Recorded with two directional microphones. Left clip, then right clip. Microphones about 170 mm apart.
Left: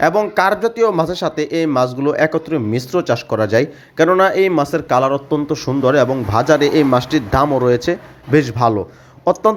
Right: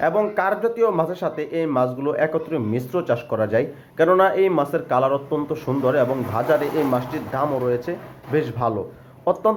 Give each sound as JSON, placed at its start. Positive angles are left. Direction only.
{"t": 0.0, "sound": "speech", "side_deg": 40}
{"t": 5.8, "sound": "speech", "side_deg": 45}